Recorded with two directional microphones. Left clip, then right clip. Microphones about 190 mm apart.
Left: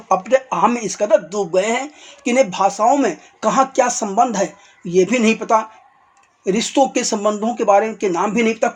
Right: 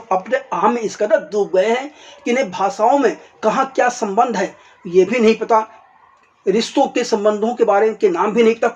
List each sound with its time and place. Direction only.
0.1 s speech: 30° left (ahead or behind)